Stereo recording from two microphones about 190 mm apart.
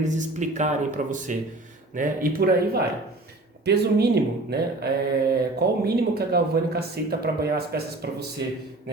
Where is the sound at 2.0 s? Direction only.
50° right (ahead or behind).